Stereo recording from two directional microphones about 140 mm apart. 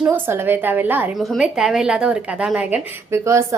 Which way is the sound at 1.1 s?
Centre (ahead or behind).